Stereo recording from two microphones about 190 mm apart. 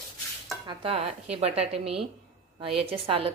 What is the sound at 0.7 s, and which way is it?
A woman's voice, 30° right (ahead or behind).